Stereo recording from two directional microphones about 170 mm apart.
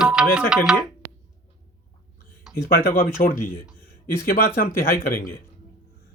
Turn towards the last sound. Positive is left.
turn(degrees=60)  # may be behind; listen again after turning